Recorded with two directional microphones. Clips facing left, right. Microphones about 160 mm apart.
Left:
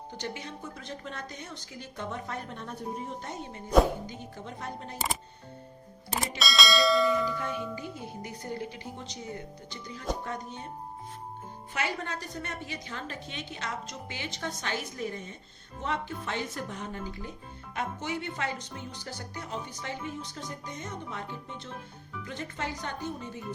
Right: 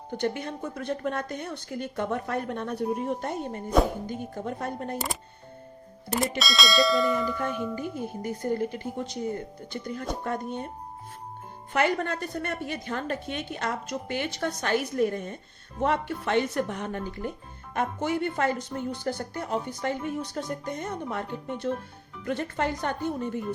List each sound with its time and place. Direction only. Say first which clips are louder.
0.1 s a woman's voice: right 10 dB; 55° right (ahead or behind)
6.4 s speech: left 1 dB; centre (ahead or behind)
7.8 s speech: right 6 dB; 50° right (ahead or behind)
11.7 s a woman's voice: right 8 dB; 55° right (ahead or behind)